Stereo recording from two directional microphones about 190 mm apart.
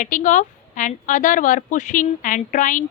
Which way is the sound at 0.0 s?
40° left (ahead or behind).